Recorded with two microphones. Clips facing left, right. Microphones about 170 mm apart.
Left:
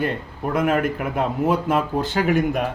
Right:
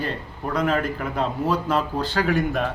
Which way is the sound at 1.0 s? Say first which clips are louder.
Left 3 dB; 20° left (ahead or behind).